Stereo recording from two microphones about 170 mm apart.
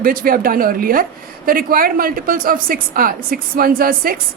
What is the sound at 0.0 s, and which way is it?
A woman's voice, 55° right (ahead or behind).